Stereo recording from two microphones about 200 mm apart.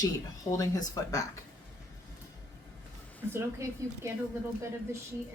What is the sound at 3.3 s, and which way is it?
Speech, 15° right (ahead or behind).